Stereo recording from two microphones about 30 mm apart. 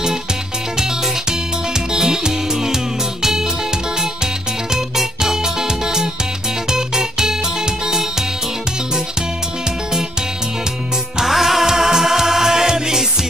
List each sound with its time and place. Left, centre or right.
1.9 s music: centre
4.7 s music: centre
11.2 s music: centre